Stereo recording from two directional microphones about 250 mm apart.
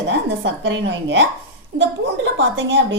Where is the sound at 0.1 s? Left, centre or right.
Right.